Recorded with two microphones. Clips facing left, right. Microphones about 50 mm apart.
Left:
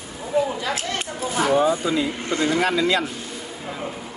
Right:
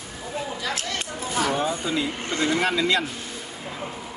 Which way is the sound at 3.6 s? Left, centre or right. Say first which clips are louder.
Left 3 dB; centre.